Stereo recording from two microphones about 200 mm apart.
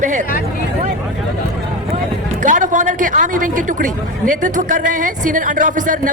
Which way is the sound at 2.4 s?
40° right (ahead or behind).